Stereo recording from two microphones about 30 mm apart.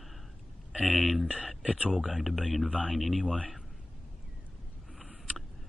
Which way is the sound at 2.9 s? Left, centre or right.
Centre.